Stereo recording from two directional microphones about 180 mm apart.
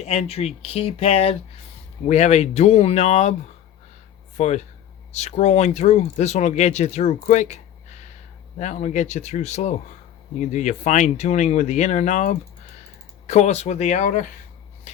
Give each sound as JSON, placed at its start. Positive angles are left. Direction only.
{"t": 0.0, "sound": "speech", "side_deg": 35}
{"t": 4.4, "sound": "speech", "side_deg": 40}